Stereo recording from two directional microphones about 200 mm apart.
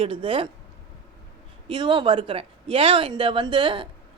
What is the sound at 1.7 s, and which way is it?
A woman's voice, 25° right (ahead or behind).